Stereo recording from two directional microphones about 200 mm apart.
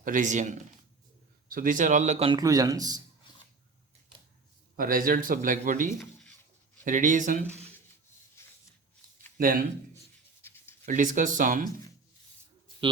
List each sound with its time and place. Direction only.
0.0 s speech: 40° right (ahead or behind)
1.5 s a man's voice: 45° right (ahead or behind); by 3.0 s 20° right (ahead or behind)
4.8 s a man's voice: 45° right (ahead or behind)
8.4 s a sound: 15° left (ahead or behind)
10.4 s writing: 10° left (ahead or behind)
10.8 s speech: 40° right (ahead or behind)